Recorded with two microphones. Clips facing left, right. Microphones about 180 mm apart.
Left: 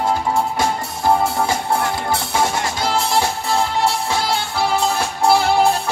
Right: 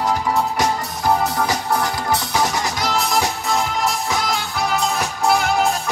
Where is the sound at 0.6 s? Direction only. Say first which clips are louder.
Even; 25° left (ahead or behind).